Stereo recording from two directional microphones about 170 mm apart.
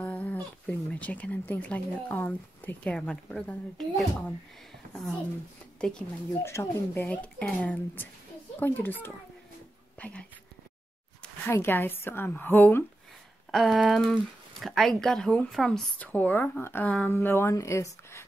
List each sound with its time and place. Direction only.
0.0 s speech: 10° left (ahead or behind)
5.8 s speech: 5° left (ahead or behind)
11.4 s speech: 15° left (ahead or behind)
13.5 s speech: centre (ahead or behind); by 18.2 s 15° left (ahead or behind)